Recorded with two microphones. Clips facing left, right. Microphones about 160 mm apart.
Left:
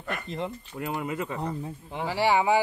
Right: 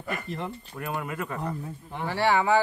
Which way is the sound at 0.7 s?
20° left (ahead or behind).